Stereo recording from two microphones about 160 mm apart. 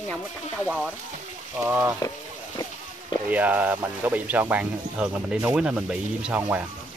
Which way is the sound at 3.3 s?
10° right (ahead or behind).